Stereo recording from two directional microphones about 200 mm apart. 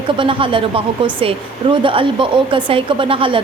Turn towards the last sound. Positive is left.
turn(degrees=-25)  # may be behind; listen again after turning